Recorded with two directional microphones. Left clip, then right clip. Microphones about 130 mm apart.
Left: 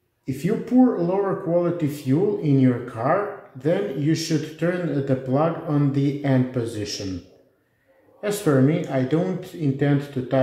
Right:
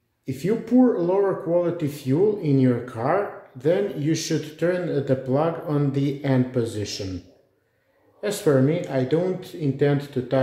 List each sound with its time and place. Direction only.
0.4 s speech: 25° right (ahead or behind)
8.2 s speech: 20° right (ahead or behind)